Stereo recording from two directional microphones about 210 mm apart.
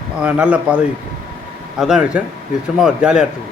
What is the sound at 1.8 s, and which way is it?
A man's voice, 5° right (ahead or behind).